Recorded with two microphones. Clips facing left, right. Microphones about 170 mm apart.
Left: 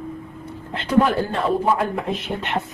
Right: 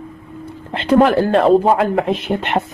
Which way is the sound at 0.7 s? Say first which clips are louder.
Right 6 dB; 90° right.